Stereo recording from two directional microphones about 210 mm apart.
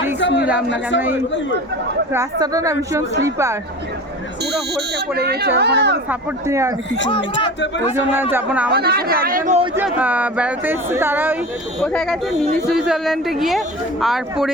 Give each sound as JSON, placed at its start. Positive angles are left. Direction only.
{"t": 0.2, "sound": "a sound", "side_deg": 60}
{"t": 0.7, "sound": "a man's voice", "side_deg": 60}
{"t": 2.1, "sound": "speech", "side_deg": -15}
{"t": 4.7, "sound": "speech", "side_deg": -50}
{"t": 6.1, "sound": "speech", "side_deg": -15}
{"t": 7.1, "sound": "a man's voice", "side_deg": 25}
{"t": 8.2, "sound": "speech", "side_deg": -10}
{"t": 8.7, "sound": "speech", "side_deg": -50}
{"t": 9.7, "sound": "speech", "side_deg": -5}
{"t": 11.8, "sound": "speech", "side_deg": 0}